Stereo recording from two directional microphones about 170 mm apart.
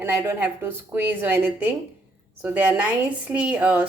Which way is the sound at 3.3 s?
5° right (ahead or behind).